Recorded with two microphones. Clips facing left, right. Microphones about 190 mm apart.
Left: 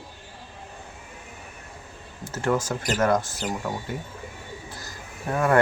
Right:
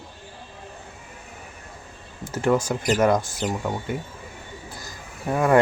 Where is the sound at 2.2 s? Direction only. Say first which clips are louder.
Right 3 dB; 15° right (ahead or behind).